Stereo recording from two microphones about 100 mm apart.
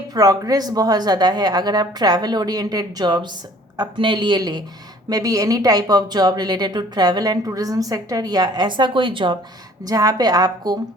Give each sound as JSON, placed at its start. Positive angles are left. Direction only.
{"t": 0.1, "sound": "speech", "side_deg": -40}
{"t": 9.8, "sound": "speech", "side_deg": -40}